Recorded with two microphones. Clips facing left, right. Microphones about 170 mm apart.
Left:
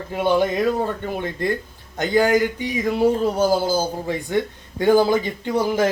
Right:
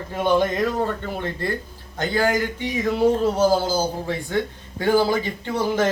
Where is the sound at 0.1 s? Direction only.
10° left (ahead or behind).